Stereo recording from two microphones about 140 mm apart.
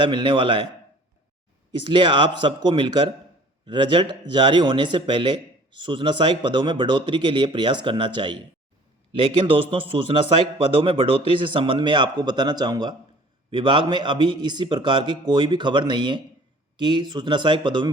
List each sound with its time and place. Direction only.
0.0 s a man's voice: 35° right (ahead or behind)
1.8 s a man's voice: 35° right (ahead or behind)